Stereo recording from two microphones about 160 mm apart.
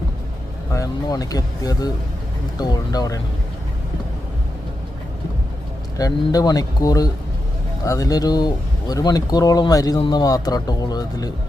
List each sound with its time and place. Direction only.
0.7 s speech: 20° left (ahead or behind)
6.0 s speech: 20° left (ahead or behind)